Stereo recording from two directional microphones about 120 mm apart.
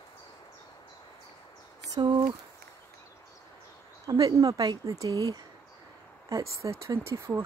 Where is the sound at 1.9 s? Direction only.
35° right (ahead or behind).